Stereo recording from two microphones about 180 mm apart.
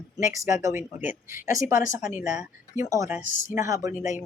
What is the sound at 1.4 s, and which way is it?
Speech, 45° left (ahead or behind).